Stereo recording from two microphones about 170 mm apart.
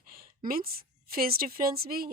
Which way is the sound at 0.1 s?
60° right (ahead or behind).